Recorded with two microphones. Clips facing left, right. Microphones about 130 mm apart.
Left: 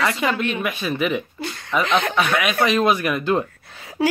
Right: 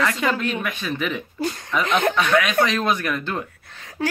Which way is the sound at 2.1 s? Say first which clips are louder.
Right 1 dB; 10° left (ahead or behind).